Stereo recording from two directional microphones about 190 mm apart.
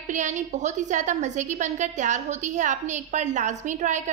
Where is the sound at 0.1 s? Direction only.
40° right (ahead or behind).